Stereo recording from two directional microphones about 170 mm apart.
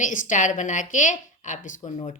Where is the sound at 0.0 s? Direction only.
50° left (ahead or behind).